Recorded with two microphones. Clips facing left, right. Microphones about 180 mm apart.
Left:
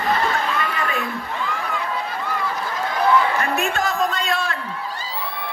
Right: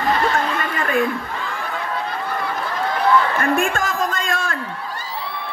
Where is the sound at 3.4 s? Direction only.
50° right (ahead or behind).